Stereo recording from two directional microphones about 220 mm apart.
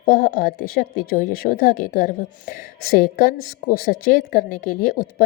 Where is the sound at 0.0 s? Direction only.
40° left (ahead or behind).